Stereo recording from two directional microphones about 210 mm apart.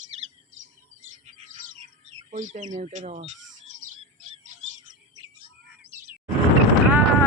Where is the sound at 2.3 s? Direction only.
35° right (ahead or behind).